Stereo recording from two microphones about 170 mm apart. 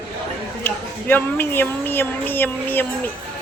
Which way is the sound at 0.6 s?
10° left (ahead or behind).